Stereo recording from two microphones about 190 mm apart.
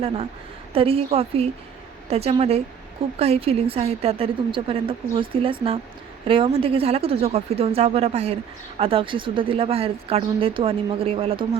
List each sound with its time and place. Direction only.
0.7 s a woman's voice: 30° right (ahead or behind)